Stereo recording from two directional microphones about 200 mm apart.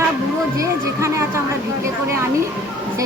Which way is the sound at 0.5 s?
15° right (ahead or behind).